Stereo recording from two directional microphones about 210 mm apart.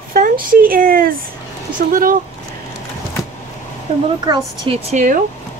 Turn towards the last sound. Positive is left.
turn(degrees=-35)  # may be behind; listen again after turning